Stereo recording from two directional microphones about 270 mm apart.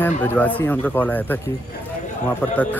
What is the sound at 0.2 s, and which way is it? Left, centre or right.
Speech, centre.